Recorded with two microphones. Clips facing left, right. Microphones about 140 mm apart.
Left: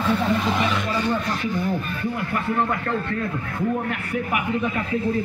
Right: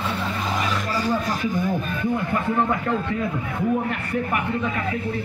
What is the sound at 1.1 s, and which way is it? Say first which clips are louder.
A man's voice: right 1 dB; 15° right (ahead or behind).